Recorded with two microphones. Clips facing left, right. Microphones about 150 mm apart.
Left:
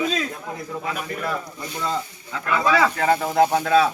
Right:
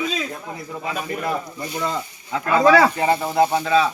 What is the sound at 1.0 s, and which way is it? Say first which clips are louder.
Speech: right 6 dB; 25° right (ahead or behind).